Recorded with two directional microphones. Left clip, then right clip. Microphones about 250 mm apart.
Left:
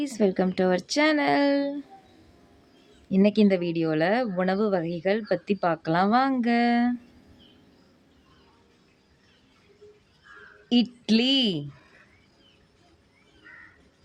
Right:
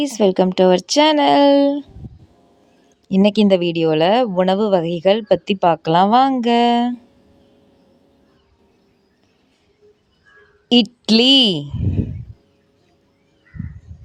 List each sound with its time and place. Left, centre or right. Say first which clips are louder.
0.0 s speech: right 9 dB; right
3.1 s speech: right 8 dB; right
10.7 s speech: right 10 dB; right